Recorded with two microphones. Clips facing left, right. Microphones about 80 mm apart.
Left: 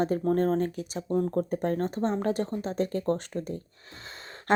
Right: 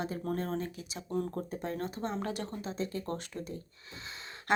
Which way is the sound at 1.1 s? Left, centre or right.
Left.